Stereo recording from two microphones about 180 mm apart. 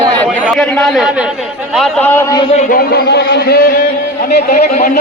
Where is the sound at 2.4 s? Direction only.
35° left (ahead or behind).